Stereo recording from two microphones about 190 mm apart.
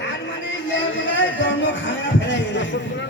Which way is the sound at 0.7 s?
75° left (ahead or behind).